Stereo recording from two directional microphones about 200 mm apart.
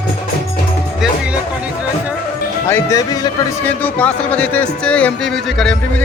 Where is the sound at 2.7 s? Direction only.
15° left (ahead or behind).